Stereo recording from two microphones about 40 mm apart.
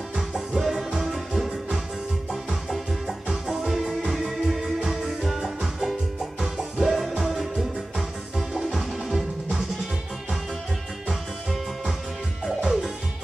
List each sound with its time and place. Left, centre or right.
0.3 s music: centre
3.3 s music: centre
12.4 s music: centre